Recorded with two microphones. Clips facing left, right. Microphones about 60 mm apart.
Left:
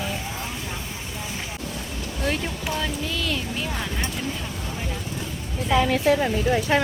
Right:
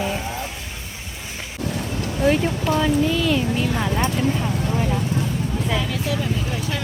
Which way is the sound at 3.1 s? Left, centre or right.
Centre.